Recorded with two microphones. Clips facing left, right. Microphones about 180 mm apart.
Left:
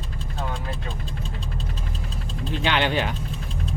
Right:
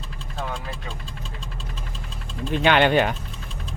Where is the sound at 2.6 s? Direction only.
55° right (ahead or behind).